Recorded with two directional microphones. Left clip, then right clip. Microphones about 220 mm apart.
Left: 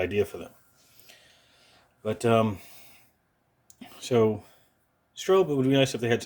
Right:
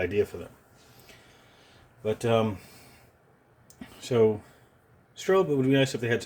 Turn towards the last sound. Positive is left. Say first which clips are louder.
# left 1 dB
turn(degrees=25)  # may be behind; listen again after turning